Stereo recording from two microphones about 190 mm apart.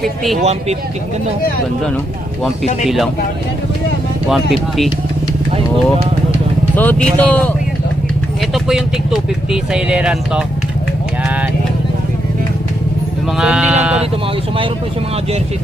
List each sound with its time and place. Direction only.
0.0 s speech: centre (ahead or behind)
0.3 s speech: 35° right (ahead or behind)
2.8 s speech: centre (ahead or behind)
4.3 s speech: centre (ahead or behind)
6.7 s speech: 10° left (ahead or behind)
13.3 s speech: 5° right (ahead or behind)